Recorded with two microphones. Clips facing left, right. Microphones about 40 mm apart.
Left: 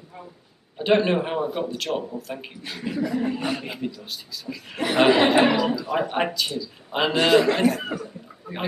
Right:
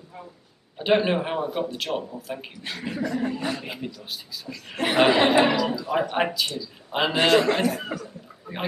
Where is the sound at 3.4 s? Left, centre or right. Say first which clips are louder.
Left 2 dB; centre.